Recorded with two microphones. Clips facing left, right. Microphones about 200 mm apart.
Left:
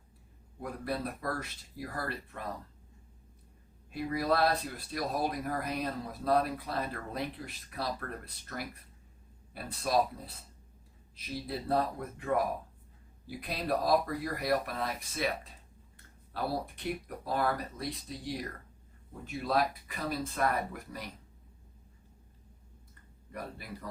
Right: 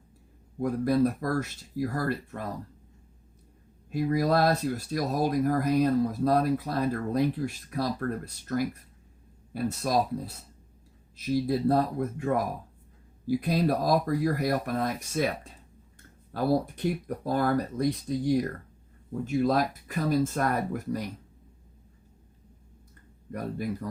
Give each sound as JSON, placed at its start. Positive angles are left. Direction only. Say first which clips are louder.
{"t": 0.6, "sound": "speech", "louder": "right 12 dB", "side_deg": -45}
{"t": 3.9, "sound": "speech", "louder": "right 6 dB", "side_deg": -45}
{"t": 16.3, "sound": "speech", "louder": "right 9 dB", "side_deg": -45}